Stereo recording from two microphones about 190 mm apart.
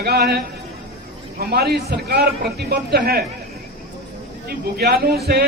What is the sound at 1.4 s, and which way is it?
A man's voice, 55° right (ahead or behind).